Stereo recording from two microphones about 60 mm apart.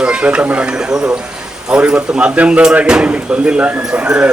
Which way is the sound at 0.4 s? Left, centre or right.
Centre.